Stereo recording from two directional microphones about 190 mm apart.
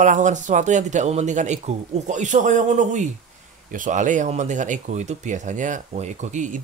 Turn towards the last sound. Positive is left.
turn(degrees=-40)  # may be behind; listen again after turning